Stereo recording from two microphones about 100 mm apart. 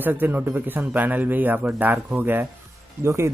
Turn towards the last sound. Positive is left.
turn(degrees=-25)  # may be behind; listen again after turning